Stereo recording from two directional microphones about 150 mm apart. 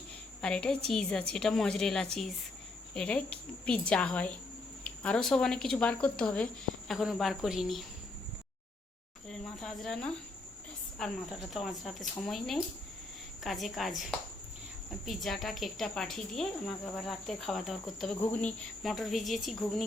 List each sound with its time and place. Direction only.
0.4 s a woman's voice: 5° left (ahead or behind)
9.2 s speech: 5° left (ahead or behind)